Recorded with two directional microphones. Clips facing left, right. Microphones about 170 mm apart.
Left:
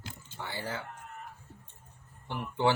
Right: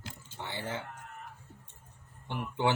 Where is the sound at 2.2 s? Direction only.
20° right (ahead or behind).